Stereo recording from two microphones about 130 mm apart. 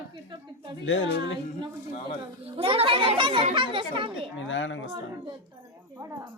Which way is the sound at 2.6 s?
45° right (ahead or behind).